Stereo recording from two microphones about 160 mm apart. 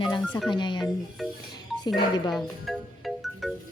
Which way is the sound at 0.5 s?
30° left (ahead or behind).